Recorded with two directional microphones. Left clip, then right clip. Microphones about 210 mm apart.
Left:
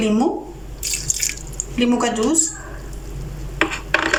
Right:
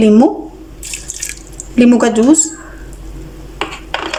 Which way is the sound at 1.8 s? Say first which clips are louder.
Right 8 dB; 55° right (ahead or behind).